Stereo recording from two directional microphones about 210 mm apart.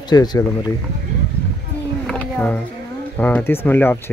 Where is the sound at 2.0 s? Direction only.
5° left (ahead or behind).